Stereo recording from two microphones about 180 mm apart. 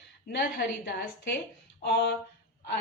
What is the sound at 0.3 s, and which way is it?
Speech, 65° left (ahead or behind).